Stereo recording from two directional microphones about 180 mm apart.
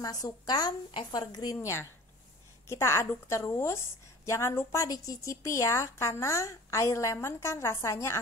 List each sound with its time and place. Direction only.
0.0 s a woman's voice: 20° left (ahead or behind)